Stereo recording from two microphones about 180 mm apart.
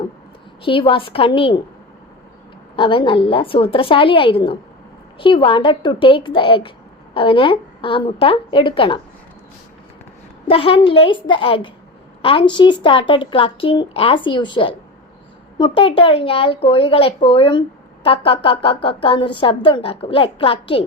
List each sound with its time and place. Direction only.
0.6 s speech: 30° left (ahead or behind)
2.7 s speech: 30° left (ahead or behind)
10.4 s a woman's voice: 30° left (ahead or behind)